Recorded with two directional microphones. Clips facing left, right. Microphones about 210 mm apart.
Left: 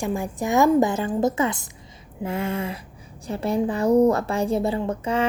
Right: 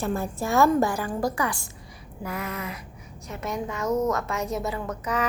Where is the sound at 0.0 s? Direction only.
15° left (ahead or behind).